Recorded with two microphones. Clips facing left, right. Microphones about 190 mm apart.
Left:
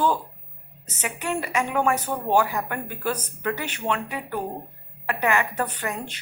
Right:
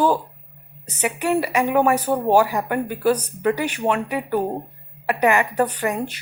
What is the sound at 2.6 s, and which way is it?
A woman's voice, 10° right (ahead or behind).